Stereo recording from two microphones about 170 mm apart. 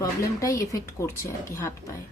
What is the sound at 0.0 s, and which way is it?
Speech, 20° left (ahead or behind).